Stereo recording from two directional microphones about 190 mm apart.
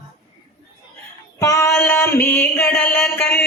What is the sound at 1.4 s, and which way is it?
A woman's voice, 15° left (ahead or behind).